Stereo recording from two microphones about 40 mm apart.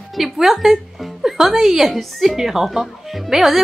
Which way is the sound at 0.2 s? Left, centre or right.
Centre.